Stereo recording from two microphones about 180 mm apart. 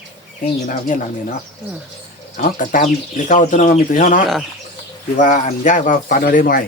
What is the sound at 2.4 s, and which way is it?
A man's voice, 50° left (ahead or behind).